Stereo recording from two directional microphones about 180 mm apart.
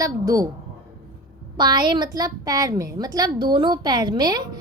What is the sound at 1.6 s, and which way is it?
A woman's voice, 25° right (ahead or behind).